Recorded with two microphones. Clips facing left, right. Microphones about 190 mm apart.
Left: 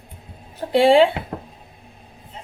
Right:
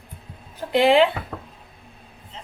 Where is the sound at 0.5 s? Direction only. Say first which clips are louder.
Left 3 dB; 30° left (ahead or behind).